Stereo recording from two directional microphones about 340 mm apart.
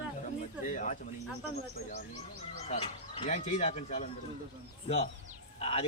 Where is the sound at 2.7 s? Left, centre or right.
Centre.